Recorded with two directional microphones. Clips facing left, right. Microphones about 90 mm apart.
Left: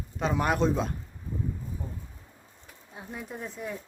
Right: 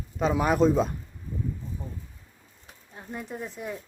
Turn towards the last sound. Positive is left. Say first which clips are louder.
# right 1 dB
turn(degrees=-5)  # may be behind; listen again after turning